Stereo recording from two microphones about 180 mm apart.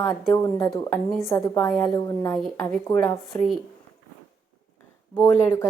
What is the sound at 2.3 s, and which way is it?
Speech, centre (ahead or behind).